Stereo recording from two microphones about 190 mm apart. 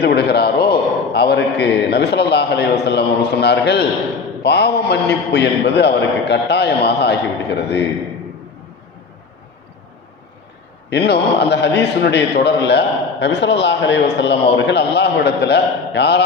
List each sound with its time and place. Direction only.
0.0 s a man's voice: 55° left (ahead or behind)
10.8 s a man's voice: 65° left (ahead or behind)